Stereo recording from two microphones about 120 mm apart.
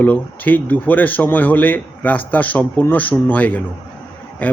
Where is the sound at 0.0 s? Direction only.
15° left (ahead or behind).